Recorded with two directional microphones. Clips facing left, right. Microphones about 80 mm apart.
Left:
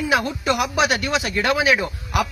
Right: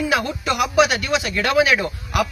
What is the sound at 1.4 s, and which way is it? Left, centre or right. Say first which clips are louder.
Speech: right 2 dB; centre.